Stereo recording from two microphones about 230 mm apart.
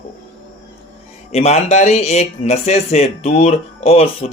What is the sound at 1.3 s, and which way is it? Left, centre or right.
Speech, left.